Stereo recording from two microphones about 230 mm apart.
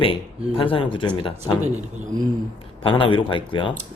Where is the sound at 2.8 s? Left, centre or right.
Left.